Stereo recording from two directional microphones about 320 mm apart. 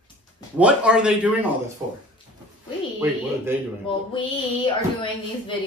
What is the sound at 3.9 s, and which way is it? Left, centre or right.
Speech, centre.